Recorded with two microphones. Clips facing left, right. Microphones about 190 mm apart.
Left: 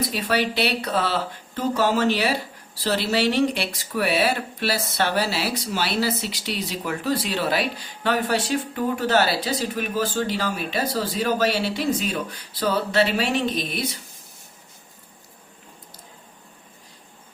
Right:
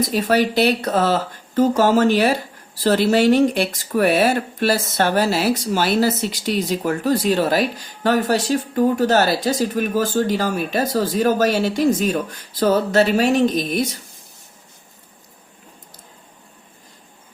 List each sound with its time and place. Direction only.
0.0 s speech: 45° right (ahead or behind)